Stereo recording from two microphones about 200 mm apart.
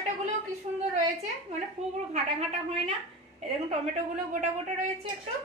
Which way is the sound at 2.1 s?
35° right (ahead or behind).